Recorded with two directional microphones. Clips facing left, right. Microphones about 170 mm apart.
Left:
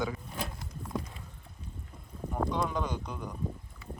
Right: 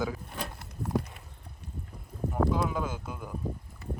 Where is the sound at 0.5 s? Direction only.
65° right (ahead or behind).